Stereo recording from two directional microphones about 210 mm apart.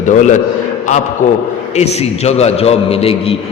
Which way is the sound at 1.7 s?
30° left (ahead or behind).